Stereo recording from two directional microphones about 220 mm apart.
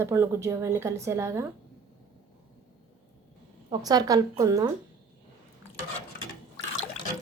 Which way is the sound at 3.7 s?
15° right (ahead or behind).